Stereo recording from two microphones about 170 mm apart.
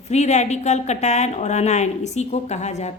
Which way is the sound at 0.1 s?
40° left (ahead or behind).